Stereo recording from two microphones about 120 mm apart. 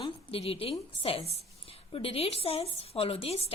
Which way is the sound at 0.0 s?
50° left (ahead or behind).